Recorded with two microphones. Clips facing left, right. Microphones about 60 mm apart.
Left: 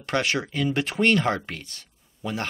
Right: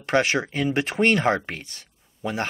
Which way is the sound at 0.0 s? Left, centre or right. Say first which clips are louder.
Right 4 dB; right.